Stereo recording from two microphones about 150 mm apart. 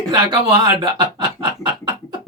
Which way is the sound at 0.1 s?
30° right (ahead or behind).